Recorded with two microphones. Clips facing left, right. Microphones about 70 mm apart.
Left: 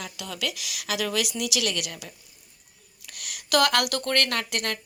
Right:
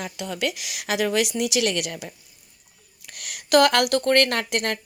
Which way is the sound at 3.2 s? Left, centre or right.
Right.